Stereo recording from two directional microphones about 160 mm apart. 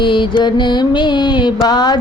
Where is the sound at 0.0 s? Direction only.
30° left (ahead or behind).